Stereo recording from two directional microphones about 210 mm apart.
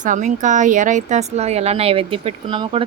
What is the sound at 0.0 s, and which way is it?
Speech, 35° right (ahead or behind).